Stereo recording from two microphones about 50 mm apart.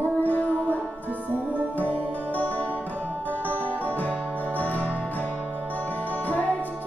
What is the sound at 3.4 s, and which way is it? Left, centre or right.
Music, left.